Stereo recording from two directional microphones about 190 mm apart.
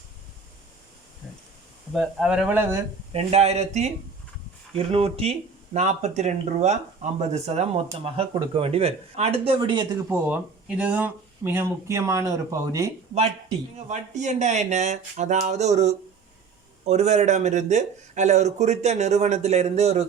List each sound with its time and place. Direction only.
1.9 s speech: centre (ahead or behind)
3.1 s speech: 35° right (ahead or behind)
10.1 s speech: 10° right (ahead or behind)
13.7 s speech: 40° right (ahead or behind)